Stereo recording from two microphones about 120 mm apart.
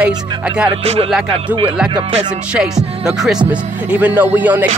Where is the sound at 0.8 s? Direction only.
60° right (ahead or behind).